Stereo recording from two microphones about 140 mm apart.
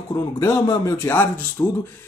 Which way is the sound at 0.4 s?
20° left (ahead or behind).